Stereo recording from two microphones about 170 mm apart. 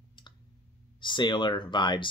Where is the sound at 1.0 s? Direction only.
25° left (ahead or behind).